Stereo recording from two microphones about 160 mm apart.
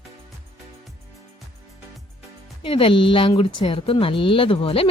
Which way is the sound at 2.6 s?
35° left (ahead or behind).